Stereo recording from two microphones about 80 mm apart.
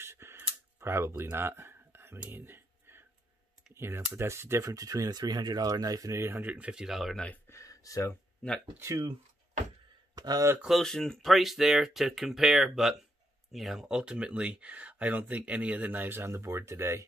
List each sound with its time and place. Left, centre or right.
0.0 s a sound: right
3.7 s speech: right
4.6 s speech: right
6.2 s speech: right
6.5 s speech: centre
7.4 s speech: left
8.7 s speech: right
10.1 s speech: right
10.7 s speech: centre; by 17.0 s right